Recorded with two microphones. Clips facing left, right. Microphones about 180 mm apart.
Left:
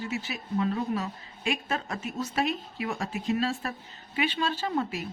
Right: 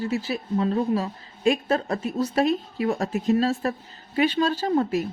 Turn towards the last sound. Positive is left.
turn(degrees=-45)  # may be behind; listen again after turning